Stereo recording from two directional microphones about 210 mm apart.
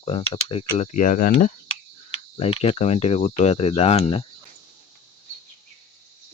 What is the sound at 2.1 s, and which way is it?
Cricket, 30° left (ahead or behind).